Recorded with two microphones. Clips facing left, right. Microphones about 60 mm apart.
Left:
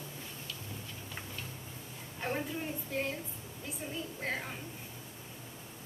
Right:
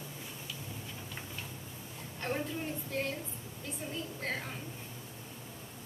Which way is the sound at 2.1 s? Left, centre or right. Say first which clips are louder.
Even; centre.